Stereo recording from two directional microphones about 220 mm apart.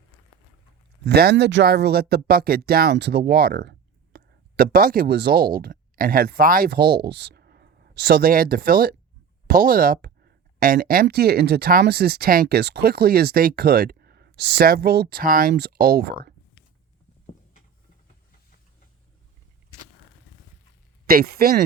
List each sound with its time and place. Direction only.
1.0 s speech: 45° right (ahead or behind)
21.1 s speech: 40° right (ahead or behind)